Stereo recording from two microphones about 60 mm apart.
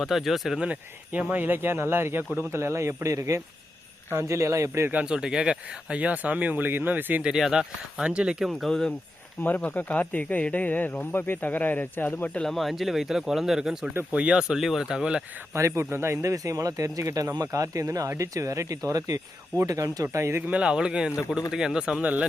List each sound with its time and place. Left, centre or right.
0.0 s speech: centre
0.6 s speech: right
4.1 s speech: right
5.0 s speech: centre; by 7.2 s right
7.2 s speech: centre
8.0 s speech: centre
9.4 s speech: left
12.4 s speech: centre
14.5 s speech: centre
15.5 s speech: right
16.3 s speech: right
20.1 s speech: right
20.5 s speech: centre
22.0 s speech: right